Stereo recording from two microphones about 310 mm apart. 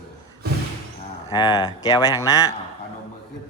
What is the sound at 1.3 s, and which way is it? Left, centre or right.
Speech, centre.